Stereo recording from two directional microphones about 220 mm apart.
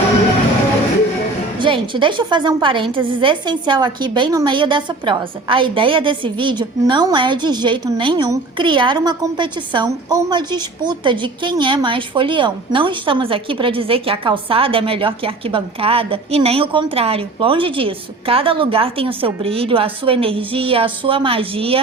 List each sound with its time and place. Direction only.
1.5 s a woman's voice: 20° right (ahead or behind)